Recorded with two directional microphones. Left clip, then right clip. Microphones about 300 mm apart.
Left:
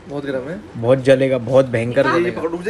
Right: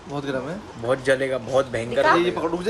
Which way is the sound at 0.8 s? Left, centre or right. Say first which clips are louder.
Left 8 dB; centre.